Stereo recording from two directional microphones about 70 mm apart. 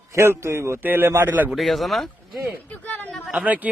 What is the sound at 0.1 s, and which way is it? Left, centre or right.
Speech, right.